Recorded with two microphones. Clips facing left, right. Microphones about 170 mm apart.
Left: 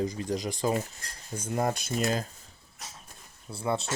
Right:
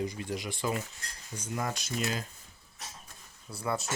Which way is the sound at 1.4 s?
50° left (ahead or behind).